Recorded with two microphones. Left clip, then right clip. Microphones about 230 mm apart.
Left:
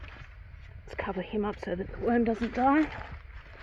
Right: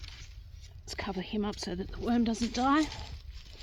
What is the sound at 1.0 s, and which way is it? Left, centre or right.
Speech, right.